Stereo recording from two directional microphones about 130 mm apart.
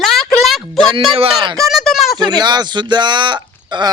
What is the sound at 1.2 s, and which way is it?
Speech, 50° right (ahead or behind).